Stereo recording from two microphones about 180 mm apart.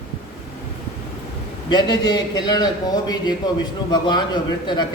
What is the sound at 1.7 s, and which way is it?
A man's voice, 25° left (ahead or behind).